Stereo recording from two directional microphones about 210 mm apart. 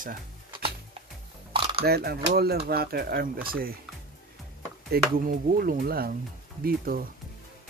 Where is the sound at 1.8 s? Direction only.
50° right (ahead or behind).